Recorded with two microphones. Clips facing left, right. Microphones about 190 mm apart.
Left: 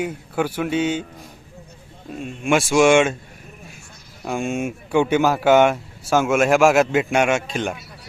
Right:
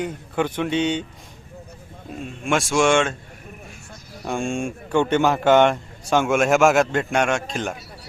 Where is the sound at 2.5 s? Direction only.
5° left (ahead or behind).